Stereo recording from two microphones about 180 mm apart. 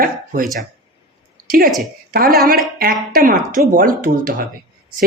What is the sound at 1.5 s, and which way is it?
Speech, 55° right (ahead or behind).